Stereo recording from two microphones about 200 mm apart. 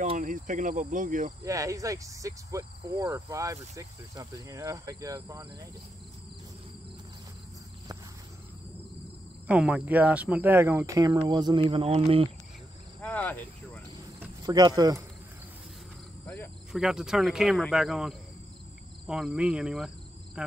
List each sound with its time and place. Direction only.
0.0 s cricket: 35° right (ahead or behind)
1.4 s speech: 15° right (ahead or behind)
9.5 s speech: 5° right (ahead or behind); by 12.3 s 25° right (ahead or behind)
13.0 s cricket: 5° left (ahead or behind)
14.4 s speech: 20° right (ahead or behind)
16.7 s speech: 5° right (ahead or behind)